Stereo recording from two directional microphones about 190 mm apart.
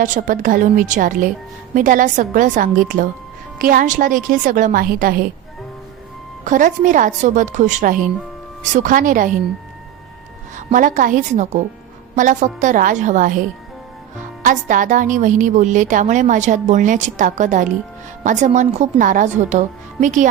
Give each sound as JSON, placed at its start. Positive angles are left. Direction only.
{"t": 0.0, "sound": "a woman's voice", "side_deg": -45}
{"t": 6.4, "sound": "a woman's voice", "side_deg": -45}
{"t": 10.7, "sound": "a woman's voice", "side_deg": -45}
{"t": 14.4, "sound": "a woman's voice", "side_deg": -45}